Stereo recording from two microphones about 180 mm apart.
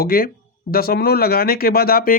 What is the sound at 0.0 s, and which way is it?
Speech, 55° left (ahead or behind).